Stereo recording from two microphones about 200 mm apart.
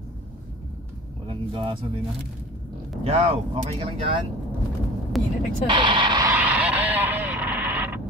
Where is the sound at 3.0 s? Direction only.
30° right (ahead or behind).